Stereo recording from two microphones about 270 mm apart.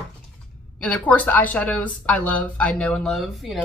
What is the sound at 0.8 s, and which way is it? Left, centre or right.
Speech, centre.